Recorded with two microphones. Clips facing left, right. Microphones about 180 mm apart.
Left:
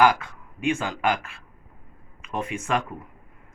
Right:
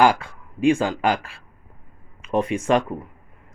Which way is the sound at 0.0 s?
30° right (ahead or behind).